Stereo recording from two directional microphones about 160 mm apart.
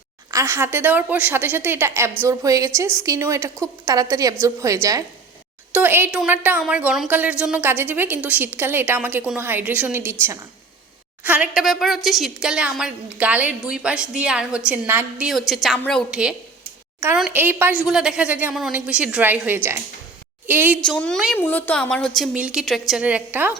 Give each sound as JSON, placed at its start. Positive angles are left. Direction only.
{"t": 0.3, "sound": "a woman's voice", "side_deg": -15}
{"t": 17.3, "sound": "a woman's voice", "side_deg": -10}
{"t": 20.8, "sound": "a woman's voice", "side_deg": 5}
{"t": 21.3, "sound": "a woman's voice", "side_deg": 10}